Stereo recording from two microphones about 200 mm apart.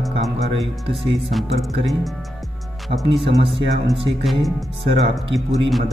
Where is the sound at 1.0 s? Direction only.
30° right (ahead or behind).